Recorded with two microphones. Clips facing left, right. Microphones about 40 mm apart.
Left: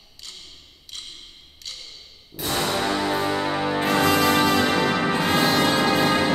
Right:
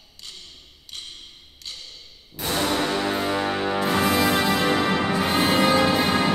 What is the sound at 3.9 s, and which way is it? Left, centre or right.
Music, left.